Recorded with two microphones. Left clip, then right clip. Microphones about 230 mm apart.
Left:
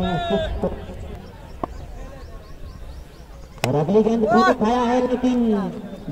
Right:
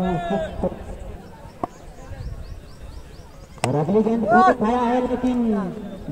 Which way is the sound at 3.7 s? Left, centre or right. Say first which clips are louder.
Left 2 dB; left.